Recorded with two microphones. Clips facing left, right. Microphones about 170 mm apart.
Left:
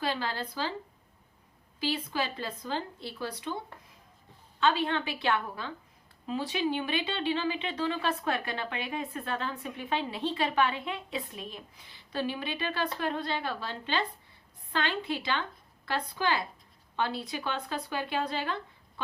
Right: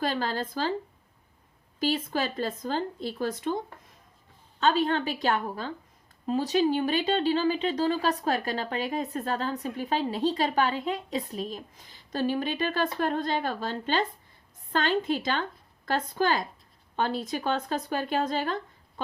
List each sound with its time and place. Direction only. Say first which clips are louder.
0.0 s a woman's voice: right 4 dB; 45° right (ahead or behind)
1.8 s a woman's voice: right 4 dB; 45° right (ahead or behind)
4.6 s a woman's voice: right 3 dB; 40° right (ahead or behind)